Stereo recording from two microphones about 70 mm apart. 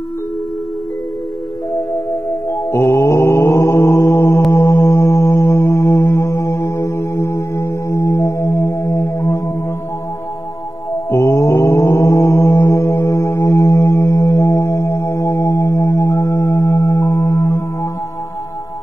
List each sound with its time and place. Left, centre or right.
2.5 s mantra: left
4.5 s music: left
11.1 s mantra: left
13.5 s music: left